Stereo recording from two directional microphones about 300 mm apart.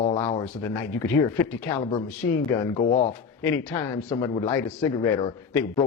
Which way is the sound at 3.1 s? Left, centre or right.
Centre.